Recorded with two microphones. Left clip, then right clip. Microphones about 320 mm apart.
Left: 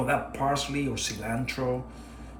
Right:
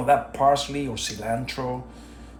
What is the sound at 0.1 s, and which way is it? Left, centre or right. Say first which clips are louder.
Speech: right 11 dB; centre.